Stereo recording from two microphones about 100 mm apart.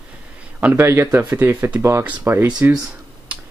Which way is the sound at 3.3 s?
15° right (ahead or behind).